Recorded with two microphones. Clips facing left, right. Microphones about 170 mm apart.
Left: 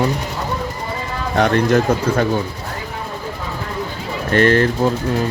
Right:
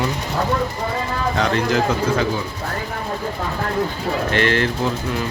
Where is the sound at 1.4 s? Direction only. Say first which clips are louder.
Left 6 dB; 55° left (ahead or behind).